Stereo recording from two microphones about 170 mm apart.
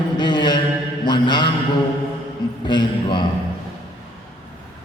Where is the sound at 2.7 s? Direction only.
25° left (ahead or behind).